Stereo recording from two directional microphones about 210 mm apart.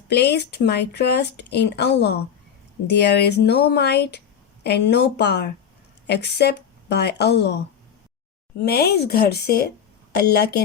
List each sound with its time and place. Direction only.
0.1 s speech: 50° left (ahead or behind)
8.6 s speech: 50° left (ahead or behind)